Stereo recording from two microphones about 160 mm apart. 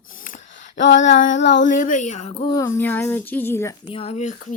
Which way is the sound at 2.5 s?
20° left (ahead or behind).